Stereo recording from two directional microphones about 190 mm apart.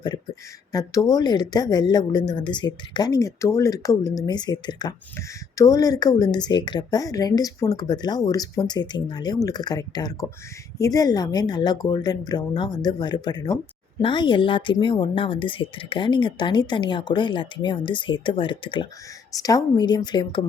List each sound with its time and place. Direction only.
0.7 s speech: 20° left (ahead or behind)